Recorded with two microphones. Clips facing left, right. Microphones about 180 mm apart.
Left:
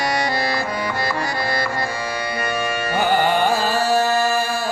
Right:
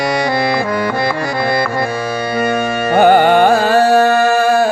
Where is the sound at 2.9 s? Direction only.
65° right (ahead or behind).